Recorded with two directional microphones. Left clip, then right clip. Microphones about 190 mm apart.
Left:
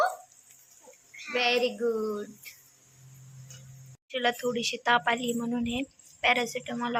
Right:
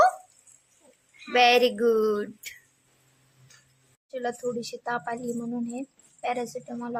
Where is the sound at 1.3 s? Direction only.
35° right (ahead or behind).